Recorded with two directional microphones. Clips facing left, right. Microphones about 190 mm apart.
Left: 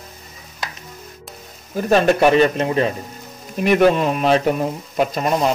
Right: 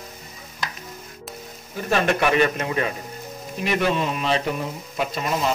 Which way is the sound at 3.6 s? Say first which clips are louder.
Left 8 dB; 50° left (ahead or behind).